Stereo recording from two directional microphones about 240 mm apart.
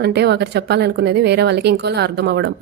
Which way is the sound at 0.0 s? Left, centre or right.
Right.